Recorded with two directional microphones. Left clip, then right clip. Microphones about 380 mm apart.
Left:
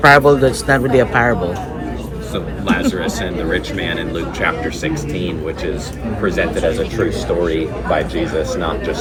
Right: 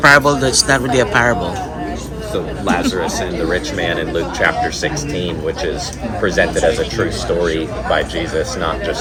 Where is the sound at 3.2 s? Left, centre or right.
Centre.